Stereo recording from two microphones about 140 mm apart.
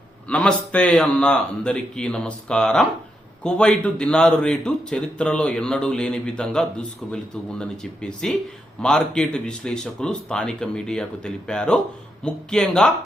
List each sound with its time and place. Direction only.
0.3 s a man's voice: 5° left (ahead or behind)